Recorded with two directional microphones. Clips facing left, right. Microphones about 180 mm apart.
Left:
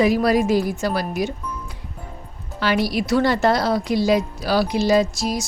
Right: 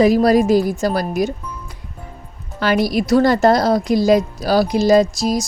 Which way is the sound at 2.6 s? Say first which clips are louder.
Right 4 dB; 45° right (ahead or behind).